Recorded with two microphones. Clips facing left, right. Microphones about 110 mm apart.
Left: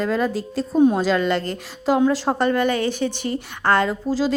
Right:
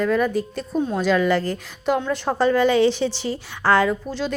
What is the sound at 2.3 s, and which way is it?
Speech, 15° left (ahead or behind).